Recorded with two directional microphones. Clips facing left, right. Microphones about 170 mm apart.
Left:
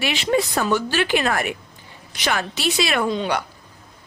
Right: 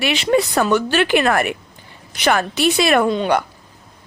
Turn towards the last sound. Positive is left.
turn(degrees=-55)  # may be behind; listen again after turning